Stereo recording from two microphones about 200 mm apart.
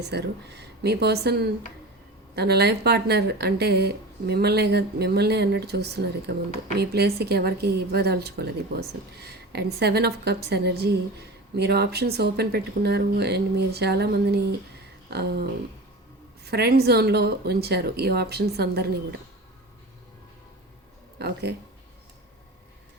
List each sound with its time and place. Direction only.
0.0 s a woman's voice: 55° right (ahead or behind)
21.2 s a woman's voice: 55° right (ahead or behind)